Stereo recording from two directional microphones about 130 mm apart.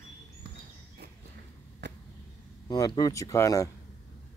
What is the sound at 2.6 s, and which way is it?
Speech, 30° left (ahead or behind).